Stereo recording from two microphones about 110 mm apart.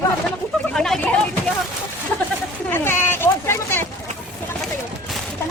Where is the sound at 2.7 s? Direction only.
20° left (ahead or behind).